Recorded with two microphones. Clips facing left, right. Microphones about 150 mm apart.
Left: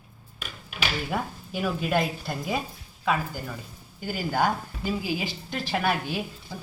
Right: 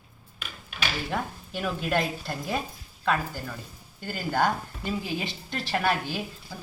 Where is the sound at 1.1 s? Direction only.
5° left (ahead or behind).